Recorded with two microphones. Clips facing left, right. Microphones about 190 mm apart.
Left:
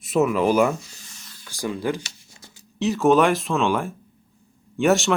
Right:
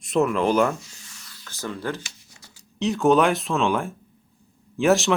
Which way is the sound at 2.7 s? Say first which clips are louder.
Left 1 dB; centre (ahead or behind).